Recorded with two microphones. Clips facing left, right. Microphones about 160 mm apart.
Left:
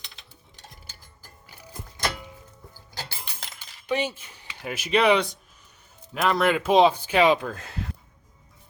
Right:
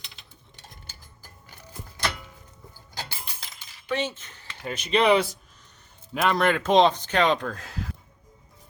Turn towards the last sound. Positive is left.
turn(degrees=0)  # may be behind; listen again after turning